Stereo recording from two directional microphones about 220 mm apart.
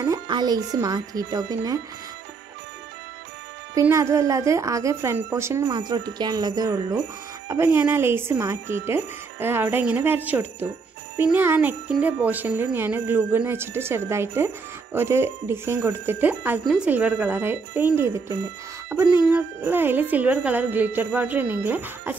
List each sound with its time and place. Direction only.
0.0 s speech: 15° right (ahead or behind)
3.7 s speech: 15° right (ahead or behind)